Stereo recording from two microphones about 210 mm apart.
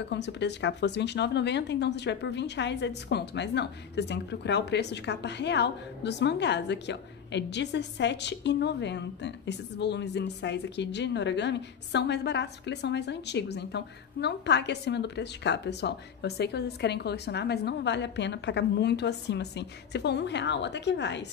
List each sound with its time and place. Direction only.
0.1 s speech: 55° left (ahead or behind)